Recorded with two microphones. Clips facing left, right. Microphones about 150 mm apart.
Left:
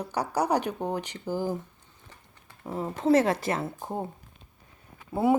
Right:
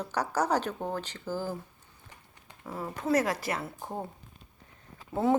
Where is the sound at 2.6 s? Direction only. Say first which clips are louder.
Left 6 dB; 20° left (ahead or behind).